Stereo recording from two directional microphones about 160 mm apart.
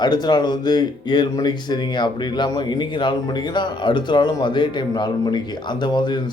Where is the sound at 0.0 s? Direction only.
25° left (ahead or behind).